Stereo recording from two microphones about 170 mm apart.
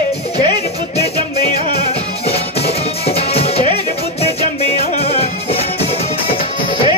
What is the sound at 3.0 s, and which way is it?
Music, 35° left (ahead or behind).